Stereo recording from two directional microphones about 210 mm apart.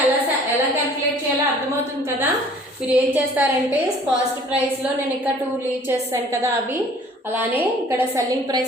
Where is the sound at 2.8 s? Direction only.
10° right (ahead or behind).